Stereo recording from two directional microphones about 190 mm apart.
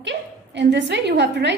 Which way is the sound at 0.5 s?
65° right (ahead or behind).